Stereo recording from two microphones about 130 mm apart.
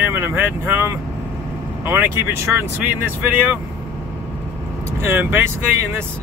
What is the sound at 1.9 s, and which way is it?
Speech, 20° right (ahead or behind).